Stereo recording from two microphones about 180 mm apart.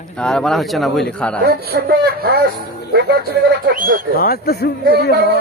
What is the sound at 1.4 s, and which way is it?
Speech, 60° right (ahead or behind).